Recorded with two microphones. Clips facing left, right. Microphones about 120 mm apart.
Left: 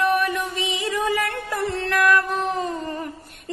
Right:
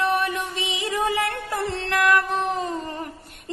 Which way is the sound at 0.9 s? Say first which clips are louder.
Right 1 dB; 25° right (ahead or behind).